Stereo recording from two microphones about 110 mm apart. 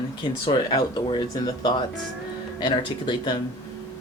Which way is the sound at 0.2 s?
45° left (ahead or behind).